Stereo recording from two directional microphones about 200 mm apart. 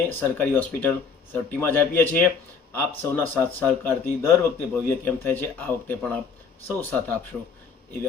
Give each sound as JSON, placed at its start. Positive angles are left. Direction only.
{"t": 0.2, "sound": "speech", "side_deg": 10}